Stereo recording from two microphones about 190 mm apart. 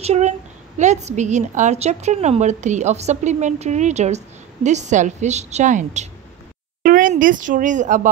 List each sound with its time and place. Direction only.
0.0 s a woman's voice: 35° right (ahead or behind)